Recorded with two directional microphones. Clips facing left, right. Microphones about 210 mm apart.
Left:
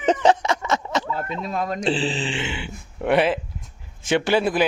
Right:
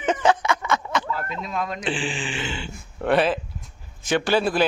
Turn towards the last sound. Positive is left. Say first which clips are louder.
# left 1 dB
turn(degrees=20)  # may be behind; listen again after turning